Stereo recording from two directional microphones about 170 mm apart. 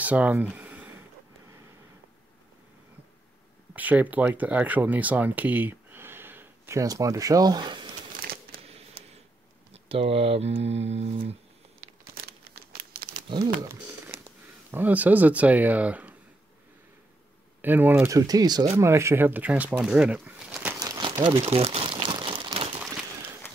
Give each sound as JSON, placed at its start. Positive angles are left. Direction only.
{"t": 0.0, "sound": "a sound", "side_deg": -10}
{"t": 3.7, "sound": "speech", "side_deg": -10}
{"t": 8.2, "sound": "a sound", "side_deg": -60}
{"t": 8.6, "sound": "a sound", "side_deg": -35}
{"t": 9.8, "sound": "speech", "side_deg": -35}
{"t": 12.3, "sound": "crumpling", "side_deg": -65}
{"t": 13.3, "sound": "speech", "side_deg": -25}
{"t": 14.7, "sound": "speech", "side_deg": -10}
{"t": 17.6, "sound": "speech", "side_deg": -10}
{"t": 20.8, "sound": "crumpling", "side_deg": -25}